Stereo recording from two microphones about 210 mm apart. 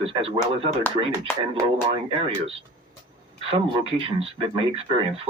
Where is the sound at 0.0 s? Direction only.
25° right (ahead or behind).